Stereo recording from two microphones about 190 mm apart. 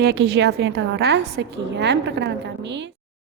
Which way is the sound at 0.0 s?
60° right (ahead or behind).